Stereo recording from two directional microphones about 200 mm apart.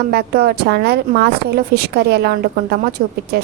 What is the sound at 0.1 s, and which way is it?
A woman's voice, 50° right (ahead or behind).